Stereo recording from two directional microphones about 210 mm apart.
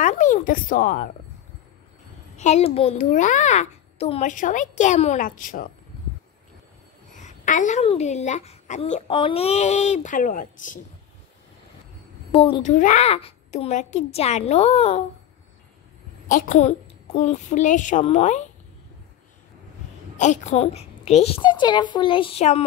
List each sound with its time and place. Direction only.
0.0 s a sound: 35° left (ahead or behind)
2.3 s a woman's voice: 30° left (ahead or behind)
7.1 s a woman's voice: 35° left (ahead or behind)
12.3 s a child's voice: 25° left (ahead or behind)
12.7 s a woman's voice: 35° left (ahead or behind)
16.3 s a woman's voice: 35° left (ahead or behind)
20.2 s a child's voice: 35° left (ahead or behind)